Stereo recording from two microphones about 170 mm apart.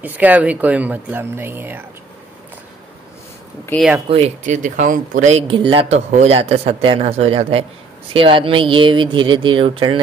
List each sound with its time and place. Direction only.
0.0 s speech: 10° right (ahead or behind)
4.1 s speech: 45° right (ahead or behind)
5.5 s speech: 30° right (ahead or behind)